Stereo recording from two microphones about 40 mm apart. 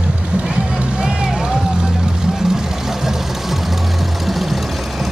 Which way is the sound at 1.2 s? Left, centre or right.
Centre.